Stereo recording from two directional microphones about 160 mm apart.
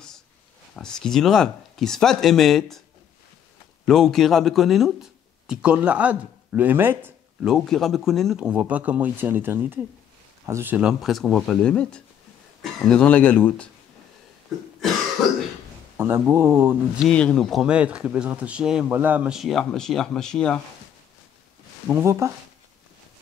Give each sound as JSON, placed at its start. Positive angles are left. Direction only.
{"t": 0.7, "sound": "speech", "side_deg": 5}
{"t": 3.8, "sound": "speech", "side_deg": 0}
{"t": 7.4, "sound": "speech", "side_deg": 0}
{"t": 16.0, "sound": "speech", "side_deg": -15}
{"t": 17.0, "sound": "speech", "side_deg": 5}
{"t": 21.8, "sound": "speech", "side_deg": -15}